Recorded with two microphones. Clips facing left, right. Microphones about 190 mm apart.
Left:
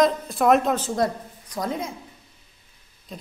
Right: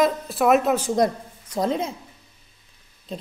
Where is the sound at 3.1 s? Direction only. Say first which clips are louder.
Right 6 dB; 25° right (ahead or behind).